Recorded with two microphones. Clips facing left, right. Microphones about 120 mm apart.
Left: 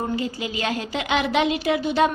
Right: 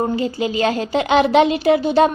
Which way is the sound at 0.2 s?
35° right (ahead or behind).